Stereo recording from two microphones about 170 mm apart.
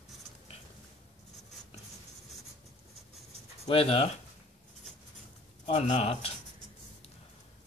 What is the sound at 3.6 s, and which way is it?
Speech, 35° left (ahead or behind).